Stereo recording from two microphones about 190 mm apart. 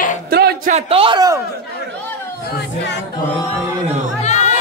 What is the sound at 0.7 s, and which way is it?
Speech, 35° right (ahead or behind).